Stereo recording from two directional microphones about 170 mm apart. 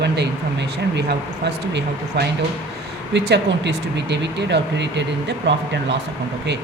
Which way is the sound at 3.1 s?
90° right.